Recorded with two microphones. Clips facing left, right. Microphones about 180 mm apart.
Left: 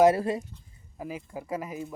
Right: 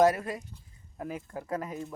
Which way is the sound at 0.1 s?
25° left (ahead or behind).